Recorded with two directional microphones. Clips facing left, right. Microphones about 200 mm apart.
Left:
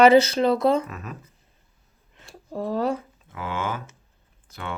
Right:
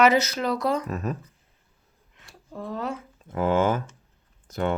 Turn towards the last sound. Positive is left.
turn(degrees=-45)  # may be behind; listen again after turning